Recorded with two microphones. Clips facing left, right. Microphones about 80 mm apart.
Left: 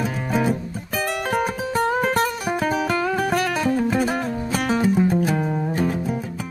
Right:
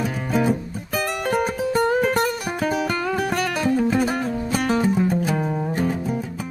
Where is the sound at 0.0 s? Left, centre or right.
Centre.